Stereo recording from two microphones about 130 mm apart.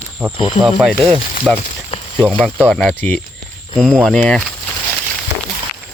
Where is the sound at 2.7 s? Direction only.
5° left (ahead or behind).